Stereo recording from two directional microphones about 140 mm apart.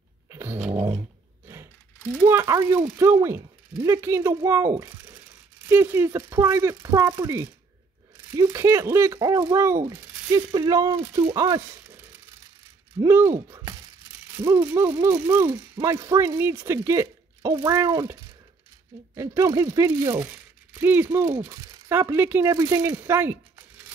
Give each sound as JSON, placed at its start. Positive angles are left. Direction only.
{"t": 0.3, "sound": "a sound", "side_deg": -15}
{"t": 0.6, "sound": "dog", "side_deg": -45}
{"t": 2.1, "sound": "speech", "side_deg": -15}
{"t": 13.0, "sound": "speech", "side_deg": -20}
{"t": 19.1, "sound": "speech", "side_deg": -20}